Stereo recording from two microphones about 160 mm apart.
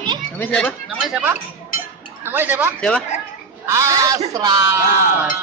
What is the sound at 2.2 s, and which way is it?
A child's voice, 10° right (ahead or behind).